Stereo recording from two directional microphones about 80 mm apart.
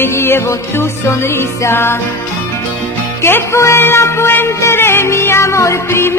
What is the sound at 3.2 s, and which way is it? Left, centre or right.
Music, left.